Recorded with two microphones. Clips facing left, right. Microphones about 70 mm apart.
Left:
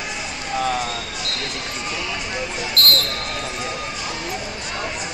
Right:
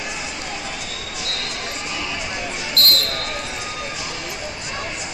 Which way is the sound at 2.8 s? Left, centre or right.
Left.